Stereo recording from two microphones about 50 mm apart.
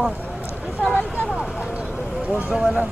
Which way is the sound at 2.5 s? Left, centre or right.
Centre.